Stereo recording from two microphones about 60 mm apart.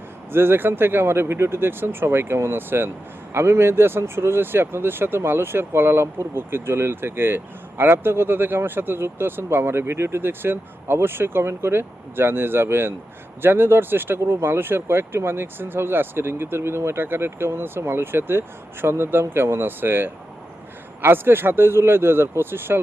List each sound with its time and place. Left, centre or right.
0.3 s speech: right